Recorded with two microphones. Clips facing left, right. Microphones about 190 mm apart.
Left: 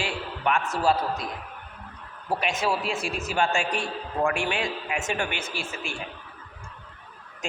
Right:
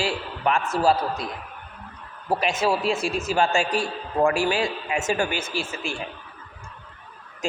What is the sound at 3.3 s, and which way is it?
A man's voice, 35° right (ahead or behind).